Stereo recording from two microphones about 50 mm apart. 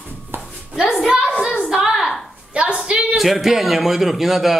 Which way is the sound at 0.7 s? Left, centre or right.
Centre.